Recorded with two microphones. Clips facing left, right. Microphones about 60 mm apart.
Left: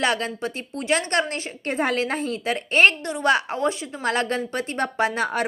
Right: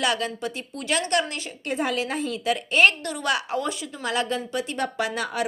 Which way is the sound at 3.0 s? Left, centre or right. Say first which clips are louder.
Left 5 dB; left.